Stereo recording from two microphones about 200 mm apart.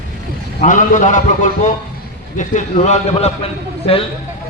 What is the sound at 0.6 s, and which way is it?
A man's voice, 40° left (ahead or behind).